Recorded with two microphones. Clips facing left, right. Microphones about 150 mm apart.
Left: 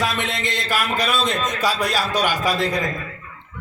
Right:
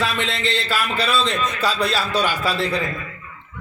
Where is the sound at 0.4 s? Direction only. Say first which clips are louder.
Right 1 dB; 15° left (ahead or behind).